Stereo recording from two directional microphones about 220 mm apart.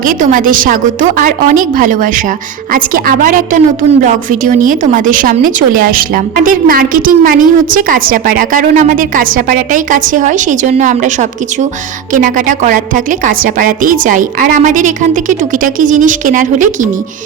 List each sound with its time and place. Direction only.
0.0 s a woman's voice: 35° right (ahead or behind)